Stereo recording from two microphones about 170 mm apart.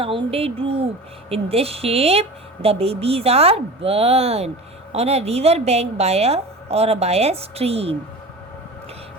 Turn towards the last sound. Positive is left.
turn(degrees=-35)  # may be behind; listen again after turning